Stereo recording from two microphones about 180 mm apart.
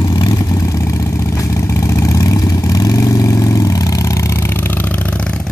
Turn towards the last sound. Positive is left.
turn(degrees=5)  # may be behind; listen again after turning